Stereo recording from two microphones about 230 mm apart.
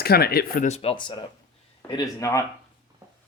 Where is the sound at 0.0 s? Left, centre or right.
Left; by 2.4 s centre.